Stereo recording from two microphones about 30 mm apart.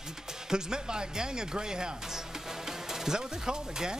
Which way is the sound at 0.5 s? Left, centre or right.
Right.